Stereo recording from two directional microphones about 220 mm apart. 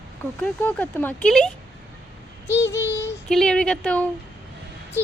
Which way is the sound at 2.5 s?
10° left (ahead or behind).